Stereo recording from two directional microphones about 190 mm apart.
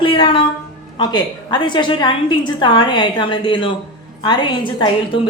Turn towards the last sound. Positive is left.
turn(degrees=25)  # may be behind; listen again after turning